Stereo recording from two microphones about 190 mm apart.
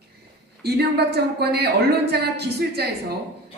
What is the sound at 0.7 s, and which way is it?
A woman's voice, 60° right (ahead or behind).